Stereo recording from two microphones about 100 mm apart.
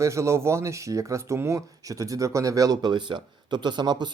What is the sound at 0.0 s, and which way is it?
Speech, 30° right (ahead or behind).